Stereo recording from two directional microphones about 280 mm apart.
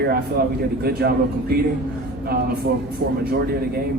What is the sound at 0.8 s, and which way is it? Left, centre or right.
Speech, right.